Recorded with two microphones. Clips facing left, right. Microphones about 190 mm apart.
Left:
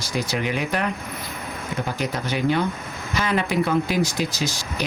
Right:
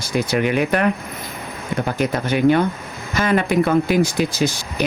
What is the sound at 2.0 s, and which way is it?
Speech, 55° right (ahead or behind).